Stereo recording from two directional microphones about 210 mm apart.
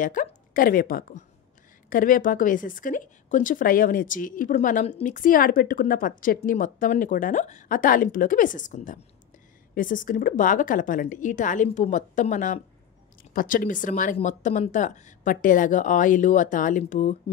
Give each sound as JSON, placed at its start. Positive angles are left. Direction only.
{"t": 0.0, "sound": "a woman's voice", "side_deg": 40}